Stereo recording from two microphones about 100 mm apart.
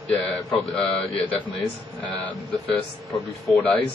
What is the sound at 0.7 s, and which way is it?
Speech, 5° left (ahead or behind).